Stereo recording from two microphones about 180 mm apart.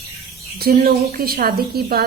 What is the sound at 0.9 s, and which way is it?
A woman's voice, 55° right (ahead or behind).